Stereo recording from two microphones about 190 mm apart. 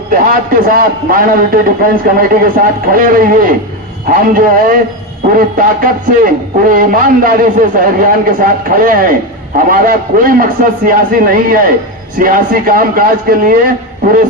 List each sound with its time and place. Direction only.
0.1 s a man's voice: 45° right (ahead or behind)